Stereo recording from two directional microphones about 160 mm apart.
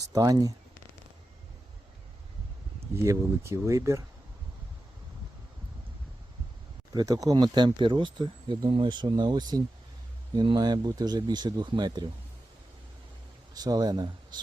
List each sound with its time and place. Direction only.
0.0 s speech: 20° right (ahead or behind)
2.9 s speech: 15° right (ahead or behind)
6.9 s speech: 25° right (ahead or behind)
13.5 s speech: 25° right (ahead or behind)